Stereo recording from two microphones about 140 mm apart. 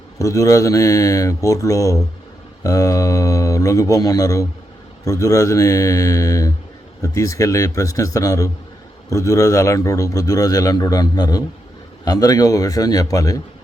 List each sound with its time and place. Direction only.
0.2 s a man's voice: 25° left (ahead or behind)